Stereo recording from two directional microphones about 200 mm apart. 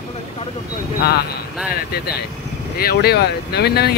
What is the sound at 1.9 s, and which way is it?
Speech, 50° left (ahead or behind).